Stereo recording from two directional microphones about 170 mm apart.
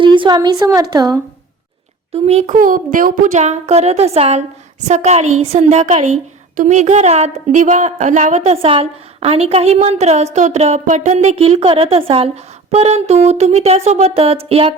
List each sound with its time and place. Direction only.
0.0 s a woman's voice: 30° right (ahead or behind)
2.1 s a woman's voice: 35° right (ahead or behind)
2.6 s a woman's voice: 50° right (ahead or behind); by 14.8 s 35° right (ahead or behind)